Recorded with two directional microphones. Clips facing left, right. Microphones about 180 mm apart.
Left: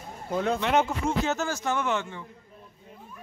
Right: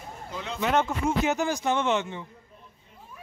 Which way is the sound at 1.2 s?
15° right (ahead or behind).